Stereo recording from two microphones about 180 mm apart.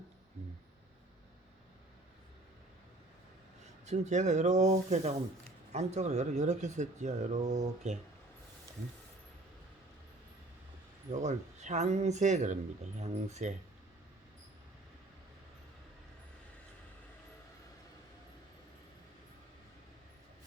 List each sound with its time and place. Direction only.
3.8 s speech: 40° right (ahead or behind)
11.1 s speech: 40° right (ahead or behind)